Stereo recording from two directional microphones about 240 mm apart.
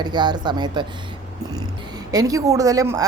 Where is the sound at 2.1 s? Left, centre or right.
Centre.